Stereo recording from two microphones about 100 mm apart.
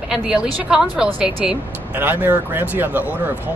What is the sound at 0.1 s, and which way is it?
A woman's voice, 10° right (ahead or behind).